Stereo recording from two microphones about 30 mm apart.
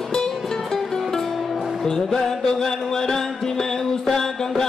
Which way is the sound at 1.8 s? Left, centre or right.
Centre.